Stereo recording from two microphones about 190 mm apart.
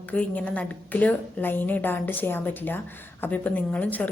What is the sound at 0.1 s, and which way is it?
A woman's voice, 5° left (ahead or behind).